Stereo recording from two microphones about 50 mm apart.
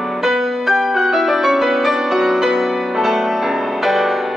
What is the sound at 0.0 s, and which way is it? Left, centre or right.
Music, centre.